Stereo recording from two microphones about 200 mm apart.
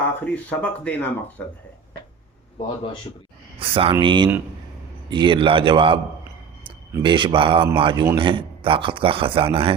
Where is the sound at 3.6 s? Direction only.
25° right (ahead or behind).